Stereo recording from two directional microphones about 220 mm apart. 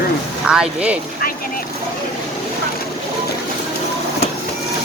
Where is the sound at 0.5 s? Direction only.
5° right (ahead or behind).